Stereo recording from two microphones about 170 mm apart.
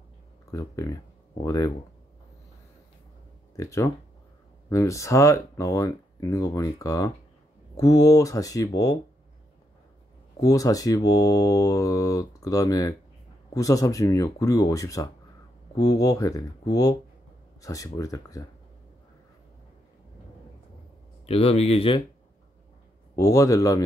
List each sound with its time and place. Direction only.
0.5 s speech: 20° left (ahead or behind)
3.5 s speech: 15° left (ahead or behind)
10.4 s speech: 20° left (ahead or behind)
21.3 s speech: 35° left (ahead or behind)
23.1 s speech: 20° left (ahead or behind)